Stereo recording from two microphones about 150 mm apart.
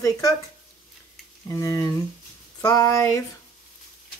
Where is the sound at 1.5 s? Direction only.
20° left (ahead or behind).